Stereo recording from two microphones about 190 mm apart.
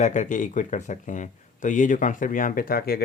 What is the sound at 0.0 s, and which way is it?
Speech, 40° left (ahead or behind).